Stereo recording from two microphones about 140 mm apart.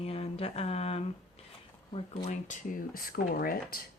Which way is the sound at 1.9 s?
45° left (ahead or behind).